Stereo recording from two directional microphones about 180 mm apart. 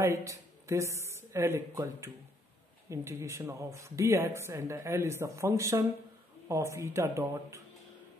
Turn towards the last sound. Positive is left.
turn(degrees=-15)  # may be behind; listen again after turning